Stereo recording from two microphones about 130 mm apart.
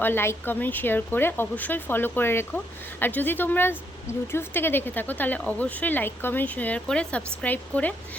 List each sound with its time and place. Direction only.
0.0 s speech: 15° left (ahead or behind)